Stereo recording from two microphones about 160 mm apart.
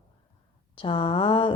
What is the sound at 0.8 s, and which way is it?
Speech, 30° left (ahead or behind).